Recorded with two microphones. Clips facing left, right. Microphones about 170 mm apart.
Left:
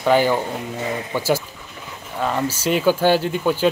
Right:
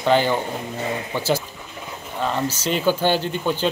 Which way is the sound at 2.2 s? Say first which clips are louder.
Left 2 dB; 5° left (ahead or behind).